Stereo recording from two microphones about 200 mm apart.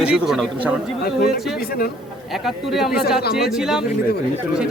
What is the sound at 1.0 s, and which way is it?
Speech, 50° left (ahead or behind).